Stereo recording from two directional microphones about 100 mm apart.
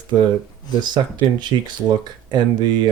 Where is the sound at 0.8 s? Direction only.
50° right (ahead or behind).